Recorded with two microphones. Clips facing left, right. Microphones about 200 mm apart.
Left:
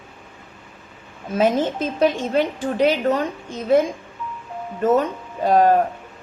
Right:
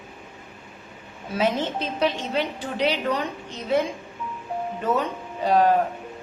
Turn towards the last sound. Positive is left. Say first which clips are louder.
# left 3 dB
turn(degrees=45)  # may be behind; listen again after turning